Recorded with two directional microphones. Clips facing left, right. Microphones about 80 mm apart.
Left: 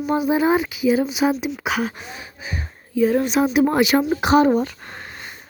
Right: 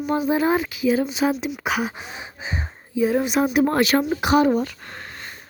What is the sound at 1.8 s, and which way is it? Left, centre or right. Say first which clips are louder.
Gasp: left 1 dB; centre.